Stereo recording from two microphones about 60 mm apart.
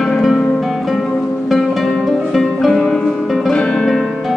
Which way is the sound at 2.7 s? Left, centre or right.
Centre.